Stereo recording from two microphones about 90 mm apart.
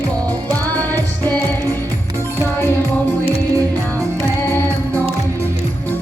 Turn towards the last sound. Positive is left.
turn(degrees=25)  # may be behind; listen again after turning